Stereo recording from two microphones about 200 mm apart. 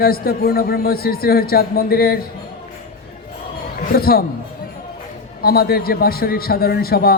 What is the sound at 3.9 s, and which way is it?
Speech, 50° left (ahead or behind).